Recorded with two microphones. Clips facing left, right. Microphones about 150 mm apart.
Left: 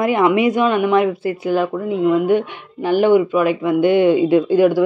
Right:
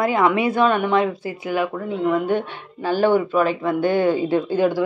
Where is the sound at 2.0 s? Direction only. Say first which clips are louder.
Left 5 dB; 10° left (ahead or behind).